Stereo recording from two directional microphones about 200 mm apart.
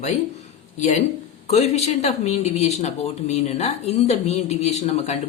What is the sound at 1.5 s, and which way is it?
Speech, 35° left (ahead or behind).